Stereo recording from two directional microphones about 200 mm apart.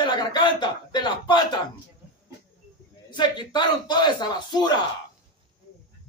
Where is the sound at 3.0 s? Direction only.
20° left (ahead or behind).